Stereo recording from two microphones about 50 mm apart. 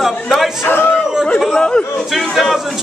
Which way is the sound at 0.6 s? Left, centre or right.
Left.